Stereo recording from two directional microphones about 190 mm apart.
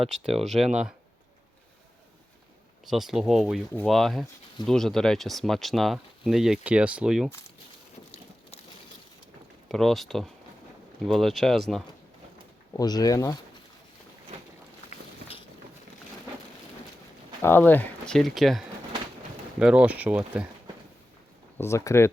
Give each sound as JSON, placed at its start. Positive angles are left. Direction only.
{"t": 0.1, "sound": "speech", "side_deg": 0}
{"t": 2.8, "sound": "speech", "side_deg": 0}
{"t": 9.6, "sound": "speech", "side_deg": 0}
{"t": 12.7, "sound": "speech", "side_deg": 20}
{"t": 17.4, "sound": "speech", "side_deg": 10}
{"t": 21.6, "sound": "speech", "side_deg": 15}